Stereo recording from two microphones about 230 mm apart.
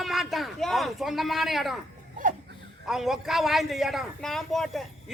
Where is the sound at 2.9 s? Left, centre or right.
Centre.